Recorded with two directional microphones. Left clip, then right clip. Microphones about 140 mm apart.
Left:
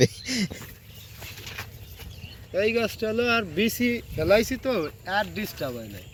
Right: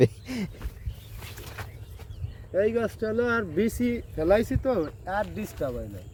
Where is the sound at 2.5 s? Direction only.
45° right (ahead or behind).